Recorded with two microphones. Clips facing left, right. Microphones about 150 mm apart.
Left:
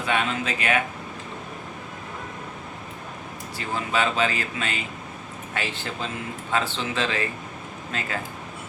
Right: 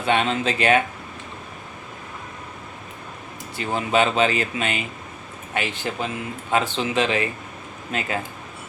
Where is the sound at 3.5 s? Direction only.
20° right (ahead or behind).